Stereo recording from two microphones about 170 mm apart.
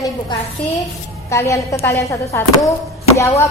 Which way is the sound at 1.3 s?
15° left (ahead or behind).